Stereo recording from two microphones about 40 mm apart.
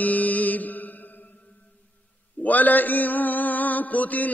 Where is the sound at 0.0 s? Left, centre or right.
Left.